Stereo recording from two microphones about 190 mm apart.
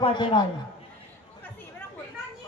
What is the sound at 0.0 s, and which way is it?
Speech, 25° left (ahead or behind).